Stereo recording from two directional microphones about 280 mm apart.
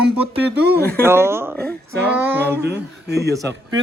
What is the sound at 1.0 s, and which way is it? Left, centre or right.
Speech, centre.